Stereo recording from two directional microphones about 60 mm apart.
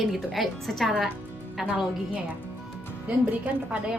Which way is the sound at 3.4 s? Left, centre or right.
Centre.